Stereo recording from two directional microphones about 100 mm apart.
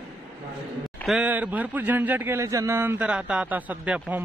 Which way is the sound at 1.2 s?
15° right (ahead or behind).